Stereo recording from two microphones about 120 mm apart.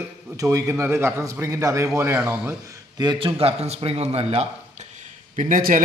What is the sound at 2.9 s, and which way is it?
A man's voice, 40° right (ahead or behind).